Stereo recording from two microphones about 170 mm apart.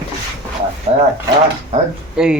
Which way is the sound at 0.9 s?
30° right (ahead or behind).